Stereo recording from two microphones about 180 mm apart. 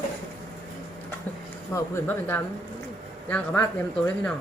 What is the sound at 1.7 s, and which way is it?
Speech, 15° left (ahead or behind).